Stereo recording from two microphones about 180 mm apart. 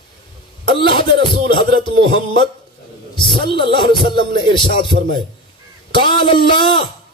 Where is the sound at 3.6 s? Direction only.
25° left (ahead or behind).